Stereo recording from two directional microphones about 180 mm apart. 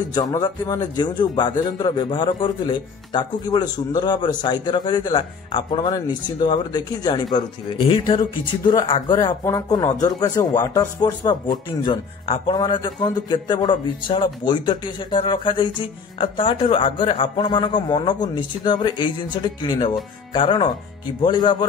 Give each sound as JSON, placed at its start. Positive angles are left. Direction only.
{"t": 0.1, "sound": "speech", "side_deg": 20}